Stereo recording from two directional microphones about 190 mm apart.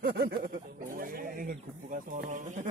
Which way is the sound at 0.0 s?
55° right (ahead or behind).